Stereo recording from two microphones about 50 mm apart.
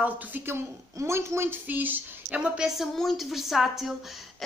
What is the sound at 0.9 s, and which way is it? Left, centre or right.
Speech, right.